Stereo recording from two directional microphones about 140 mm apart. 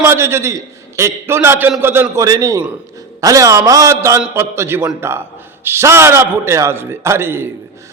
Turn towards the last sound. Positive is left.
turn(degrees=-15)  # may be behind; listen again after turning